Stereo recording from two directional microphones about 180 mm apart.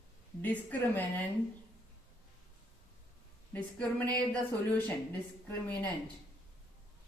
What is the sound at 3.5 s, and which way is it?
Speech, 10° left (ahead or behind).